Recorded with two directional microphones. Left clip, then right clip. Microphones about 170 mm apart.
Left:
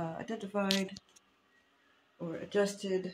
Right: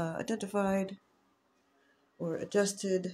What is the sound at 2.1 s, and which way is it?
Speech, 25° right (ahead or behind).